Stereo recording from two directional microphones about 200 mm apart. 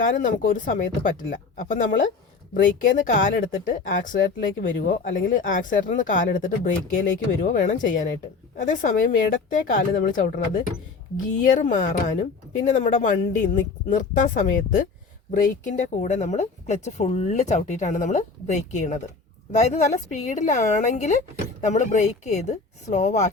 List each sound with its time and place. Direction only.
0.0 s speech: 40° left (ahead or behind)